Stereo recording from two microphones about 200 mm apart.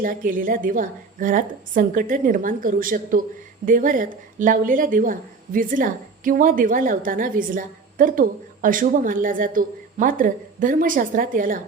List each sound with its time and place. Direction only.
0.0 s a woman's voice: 45° right (ahead or behind)